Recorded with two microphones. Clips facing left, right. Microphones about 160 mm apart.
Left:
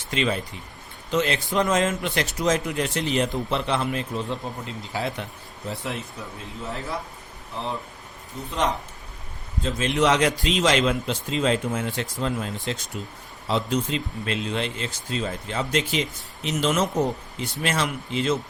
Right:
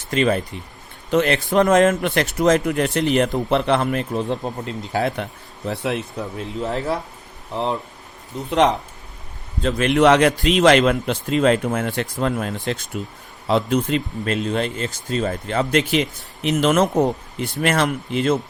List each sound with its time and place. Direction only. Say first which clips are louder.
0.1 s speech: right 6 dB; 45° right (ahead or behind)
1.1 s speech: right 6 dB; 55° right (ahead or behind)
8.4 s speech: right 8 dB; 75° right (ahead or behind); by 18.3 s 55° right (ahead or behind)